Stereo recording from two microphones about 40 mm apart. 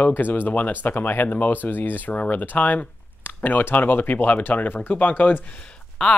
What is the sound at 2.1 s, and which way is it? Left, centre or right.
Speech, left.